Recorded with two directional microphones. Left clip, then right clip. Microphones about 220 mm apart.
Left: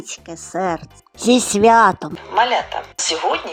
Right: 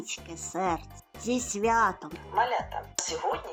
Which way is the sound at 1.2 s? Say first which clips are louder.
Left 15 dB; 45° left (ahead or behind).